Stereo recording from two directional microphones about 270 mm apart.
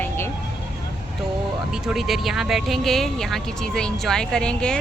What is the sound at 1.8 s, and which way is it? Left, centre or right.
Speech, centre.